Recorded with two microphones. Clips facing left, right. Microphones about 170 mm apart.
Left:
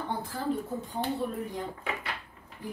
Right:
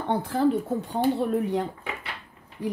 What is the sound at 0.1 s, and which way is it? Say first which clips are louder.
Speech: right 11 dB; 70° right (ahead or behind).